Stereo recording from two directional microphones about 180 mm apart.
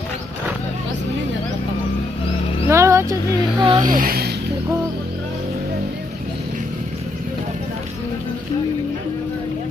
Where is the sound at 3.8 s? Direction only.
50° right (ahead or behind).